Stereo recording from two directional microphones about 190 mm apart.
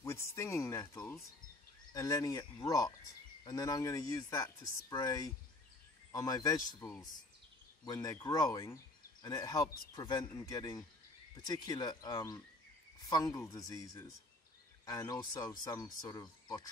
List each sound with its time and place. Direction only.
0.0 s speech: 15° left (ahead or behind)